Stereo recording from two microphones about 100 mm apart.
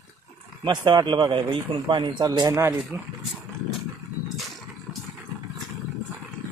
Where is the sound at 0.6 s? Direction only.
50° right (ahead or behind); by 2.7 s 35° right (ahead or behind).